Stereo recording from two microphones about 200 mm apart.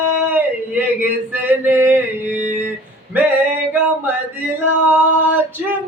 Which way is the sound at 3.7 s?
10° right (ahead or behind).